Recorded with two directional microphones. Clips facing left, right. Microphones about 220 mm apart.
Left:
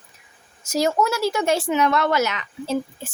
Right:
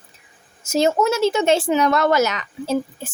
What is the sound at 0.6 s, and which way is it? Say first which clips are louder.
Speech: right 3 dB; 25° right (ahead or behind).